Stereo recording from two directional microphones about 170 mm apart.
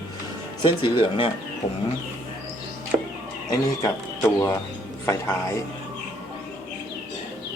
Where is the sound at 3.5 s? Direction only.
20° left (ahead or behind).